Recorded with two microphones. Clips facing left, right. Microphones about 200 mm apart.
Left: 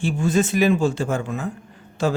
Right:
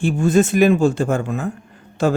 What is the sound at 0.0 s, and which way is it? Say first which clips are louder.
Speech: right 5 dB; 50° right (ahead or behind).